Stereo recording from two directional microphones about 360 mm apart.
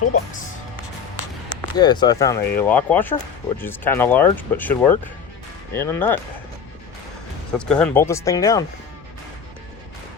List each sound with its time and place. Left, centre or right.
0.0 s speech: left
1.7 s speech: centre
7.6 s speech: centre